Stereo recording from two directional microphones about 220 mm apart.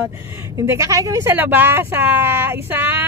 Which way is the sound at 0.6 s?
15° right (ahead or behind).